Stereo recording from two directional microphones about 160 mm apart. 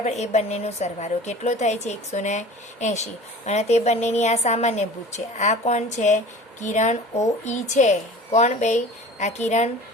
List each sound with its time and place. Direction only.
0.0 s a woman's voice: 45° left (ahead or behind)